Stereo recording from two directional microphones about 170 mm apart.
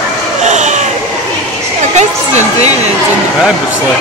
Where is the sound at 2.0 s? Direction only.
40° right (ahead or behind).